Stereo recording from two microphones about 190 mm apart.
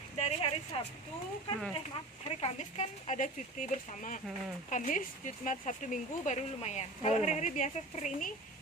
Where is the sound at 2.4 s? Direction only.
35° left (ahead or behind).